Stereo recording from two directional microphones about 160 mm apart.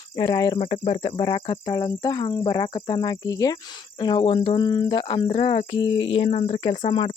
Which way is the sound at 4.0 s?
30° left (ahead or behind).